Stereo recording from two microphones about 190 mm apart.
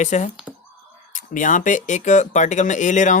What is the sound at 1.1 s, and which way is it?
Speech, 40° left (ahead or behind).